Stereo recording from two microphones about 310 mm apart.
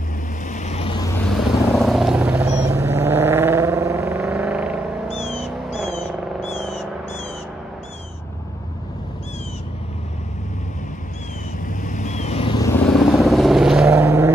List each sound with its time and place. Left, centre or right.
0.5 s vehicle: left
1.3 s vehicle: centre
11.6 s vehicle: left; by 14.3 s centre